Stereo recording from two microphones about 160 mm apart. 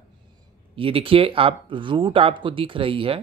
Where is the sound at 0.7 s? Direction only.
35° right (ahead or behind).